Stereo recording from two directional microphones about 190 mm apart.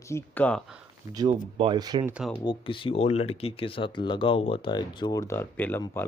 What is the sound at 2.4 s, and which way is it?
Speech, 25° left (ahead or behind).